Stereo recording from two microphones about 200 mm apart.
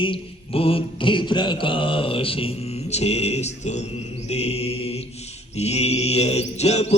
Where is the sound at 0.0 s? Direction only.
25° left (ahead or behind).